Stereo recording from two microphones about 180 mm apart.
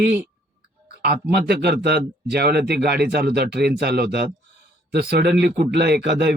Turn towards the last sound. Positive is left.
turn(degrees=-70)  # may be behind; listen again after turning